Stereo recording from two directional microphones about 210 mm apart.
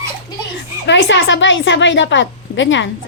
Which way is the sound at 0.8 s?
60° left (ahead or behind).